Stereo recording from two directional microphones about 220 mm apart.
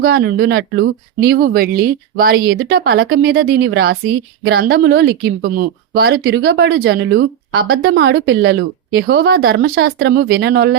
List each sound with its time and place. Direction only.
0.0 s speech: 45° right (ahead or behind)